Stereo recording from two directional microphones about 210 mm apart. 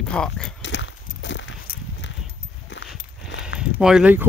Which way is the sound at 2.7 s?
60° left (ahead or behind).